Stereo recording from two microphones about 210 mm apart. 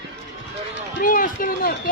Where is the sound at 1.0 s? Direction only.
40° left (ahead or behind).